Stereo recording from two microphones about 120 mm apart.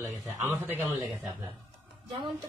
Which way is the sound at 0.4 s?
20° right (ahead or behind).